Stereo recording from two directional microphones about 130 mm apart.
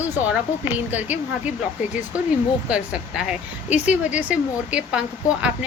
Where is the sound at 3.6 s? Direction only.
60° left (ahead or behind).